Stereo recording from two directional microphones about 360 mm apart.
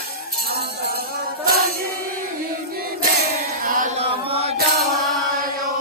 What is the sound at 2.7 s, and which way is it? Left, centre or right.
Battle cry, right.